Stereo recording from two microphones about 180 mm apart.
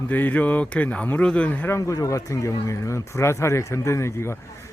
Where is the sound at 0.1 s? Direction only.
10° left (ahead or behind).